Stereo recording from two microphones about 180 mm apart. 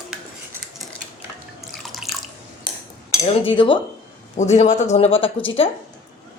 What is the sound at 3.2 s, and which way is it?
Speech, 30° left (ahead or behind).